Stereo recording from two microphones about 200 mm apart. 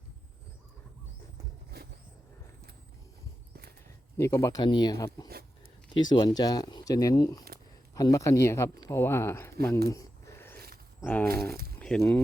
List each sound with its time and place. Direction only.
1.7 s vehicle: 50° right (ahead or behind)
4.2 s speech: 15° left (ahead or behind)
9.9 s a sound: 15° left (ahead or behind)
11.8 s speech: 5° left (ahead or behind)